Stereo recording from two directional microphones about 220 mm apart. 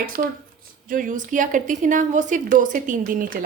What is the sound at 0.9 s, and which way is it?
A woman's voice, 35° right (ahead or behind).